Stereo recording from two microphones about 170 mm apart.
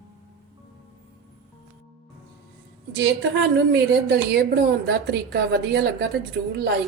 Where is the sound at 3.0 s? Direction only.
90° right; by 6.0 s 70° right (ahead or behind).